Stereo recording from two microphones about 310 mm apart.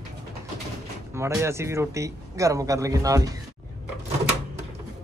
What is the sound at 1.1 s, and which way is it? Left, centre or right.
A man's voice, centre.